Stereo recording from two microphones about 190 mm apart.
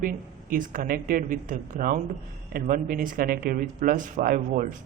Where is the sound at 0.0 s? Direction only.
45° right (ahead or behind).